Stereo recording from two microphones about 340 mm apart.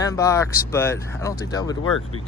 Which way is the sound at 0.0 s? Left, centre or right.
Centre.